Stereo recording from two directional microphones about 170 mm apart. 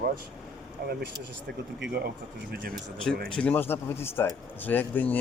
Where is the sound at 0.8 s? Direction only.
70° right (ahead or behind).